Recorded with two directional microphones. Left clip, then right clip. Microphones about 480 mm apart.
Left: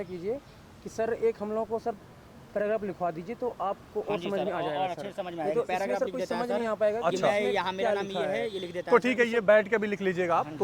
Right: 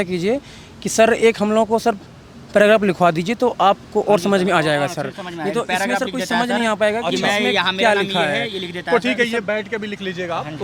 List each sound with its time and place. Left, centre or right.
0.0 s speech: right
7.0 s speech: centre
7.3 s speech: centre
8.9 s speech: centre